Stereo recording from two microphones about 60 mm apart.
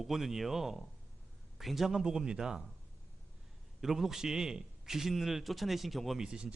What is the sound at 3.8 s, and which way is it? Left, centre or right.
A man's voice, centre.